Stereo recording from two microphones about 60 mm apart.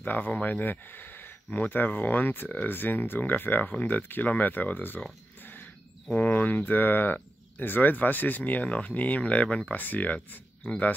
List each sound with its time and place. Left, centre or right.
0.0 s speech: left
6.1 s speech: left